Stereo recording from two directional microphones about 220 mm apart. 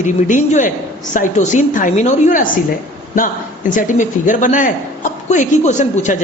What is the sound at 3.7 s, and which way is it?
A woman's voice, 35° left (ahead or behind).